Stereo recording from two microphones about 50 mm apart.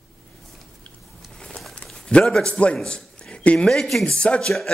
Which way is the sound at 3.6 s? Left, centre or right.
Centre.